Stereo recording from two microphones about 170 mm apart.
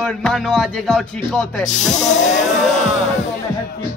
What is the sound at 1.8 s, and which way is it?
Speech, 45° left (ahead or behind).